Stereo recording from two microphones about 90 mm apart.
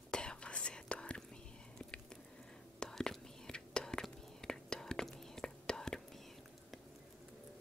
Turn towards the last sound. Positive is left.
turn(degrees=10)  # may be behind; listen again after turning